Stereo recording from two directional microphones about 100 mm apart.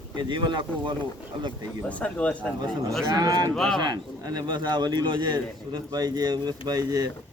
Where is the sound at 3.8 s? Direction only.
45° right (ahead or behind).